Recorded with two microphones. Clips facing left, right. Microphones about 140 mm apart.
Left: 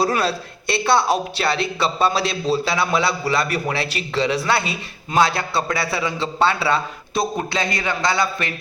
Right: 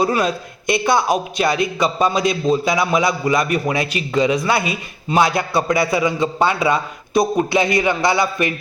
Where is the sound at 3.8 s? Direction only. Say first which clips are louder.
Right 3 dB; 35° left (ahead or behind).